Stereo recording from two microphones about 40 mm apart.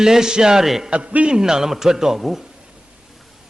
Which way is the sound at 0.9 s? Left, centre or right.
Right.